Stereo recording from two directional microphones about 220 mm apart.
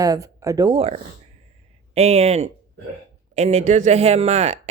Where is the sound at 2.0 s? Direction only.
30° right (ahead or behind).